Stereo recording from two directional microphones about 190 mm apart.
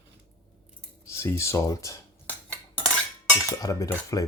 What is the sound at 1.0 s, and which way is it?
Speech, 15° left (ahead or behind).